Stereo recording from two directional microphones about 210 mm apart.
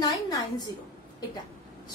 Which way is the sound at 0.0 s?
15° left (ahead or behind).